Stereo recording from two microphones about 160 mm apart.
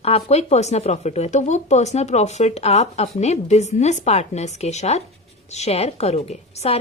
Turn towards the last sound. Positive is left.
turn(degrees=40)  # may be behind; listen again after turning